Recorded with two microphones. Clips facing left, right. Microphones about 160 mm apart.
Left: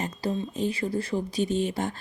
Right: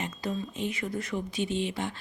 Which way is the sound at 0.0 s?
35° left (ahead or behind).